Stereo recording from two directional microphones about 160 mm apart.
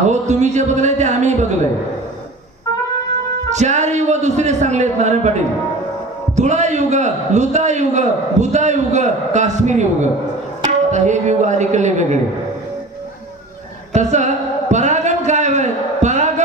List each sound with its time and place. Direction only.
0.0 s a man's voice: 45° right (ahead or behind)
3.4 s a man's voice: 45° right (ahead or behind)
13.9 s a sound: 45° right (ahead or behind)